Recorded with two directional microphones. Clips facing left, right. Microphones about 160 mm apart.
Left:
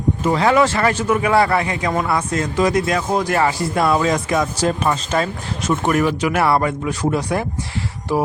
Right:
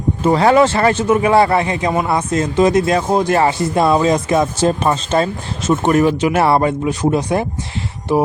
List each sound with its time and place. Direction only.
0.2 s speech: 35° right (ahead or behind)